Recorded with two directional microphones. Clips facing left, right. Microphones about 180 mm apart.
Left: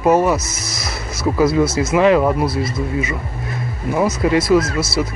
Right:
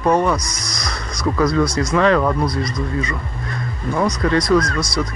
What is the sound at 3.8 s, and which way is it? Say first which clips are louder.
Speech: left 2 dB; 5° left (ahead or behind).